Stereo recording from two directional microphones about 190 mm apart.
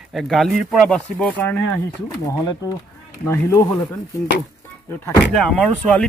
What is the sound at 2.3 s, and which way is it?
Speech, 20° left (ahead or behind).